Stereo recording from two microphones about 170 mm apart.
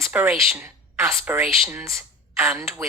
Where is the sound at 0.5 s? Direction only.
15° right (ahead or behind).